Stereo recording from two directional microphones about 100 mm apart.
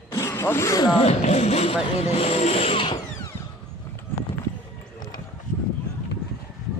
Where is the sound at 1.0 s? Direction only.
90° left; by 2.9 s 75° left (ahead or behind).